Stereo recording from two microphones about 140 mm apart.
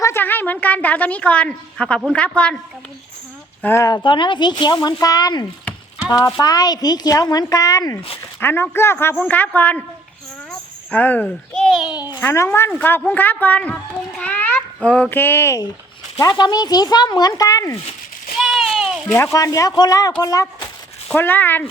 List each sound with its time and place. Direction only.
0.0 s a woman's voice: 15° left (ahead or behind)
3.6 s a man's voice: 15° left (ahead or behind)
3.8 s a woman's voice: 30° left (ahead or behind); by 9.8 s 10° left (ahead or behind)
10.9 s a child's voice: 10° left (ahead or behind)
12.2 s a man's voice: 20° left (ahead or behind)
16.1 s a woman's voice: 30° left (ahead or behind)
18.3 s a sound: centre (ahead or behind)
19.1 s a woman's voice: 20° left (ahead or behind)
21.1 s a man's voice: 15° left (ahead or behind)